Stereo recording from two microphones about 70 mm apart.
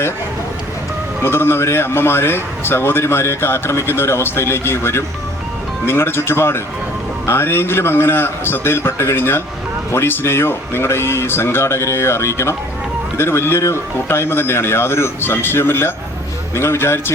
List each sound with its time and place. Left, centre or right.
1.2 s a man's voice: left